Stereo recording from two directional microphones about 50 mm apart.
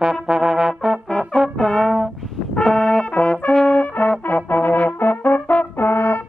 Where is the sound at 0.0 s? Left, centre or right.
Centre.